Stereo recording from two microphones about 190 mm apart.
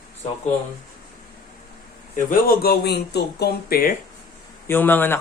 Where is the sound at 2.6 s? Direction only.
60° left (ahead or behind).